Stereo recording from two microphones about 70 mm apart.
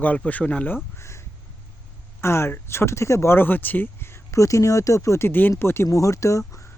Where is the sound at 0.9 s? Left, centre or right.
Left.